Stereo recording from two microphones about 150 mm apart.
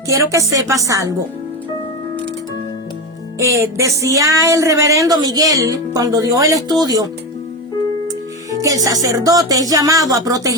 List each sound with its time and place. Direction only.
0.1 s speech: 20° right (ahead or behind)
3.3 s speech: 20° right (ahead or behind)
8.6 s speech: 25° right (ahead or behind)